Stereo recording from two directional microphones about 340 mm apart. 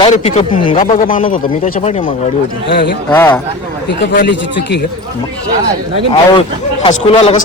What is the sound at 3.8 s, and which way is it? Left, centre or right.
Speech, left.